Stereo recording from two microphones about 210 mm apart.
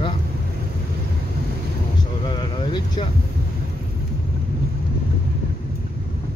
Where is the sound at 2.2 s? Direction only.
20° left (ahead or behind).